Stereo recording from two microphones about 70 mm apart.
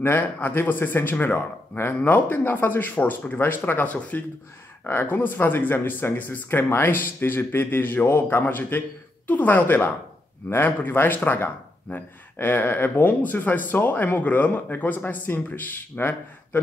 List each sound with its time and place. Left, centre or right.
0.0 s speech: left